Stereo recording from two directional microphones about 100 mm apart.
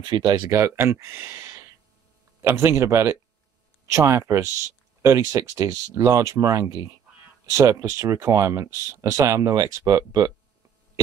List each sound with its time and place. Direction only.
0.0 s speech: 45° right (ahead or behind)
0.5 s speech: 30° right (ahead or behind)